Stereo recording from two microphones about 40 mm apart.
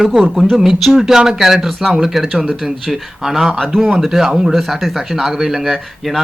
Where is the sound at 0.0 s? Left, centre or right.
Centre.